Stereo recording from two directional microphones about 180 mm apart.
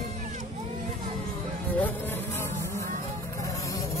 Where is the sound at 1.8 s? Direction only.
15° left (ahead or behind).